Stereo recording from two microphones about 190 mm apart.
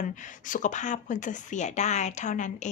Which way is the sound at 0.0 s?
40° left (ahead or behind).